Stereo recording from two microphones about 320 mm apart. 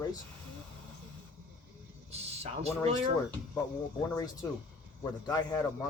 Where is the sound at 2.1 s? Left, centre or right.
Centre.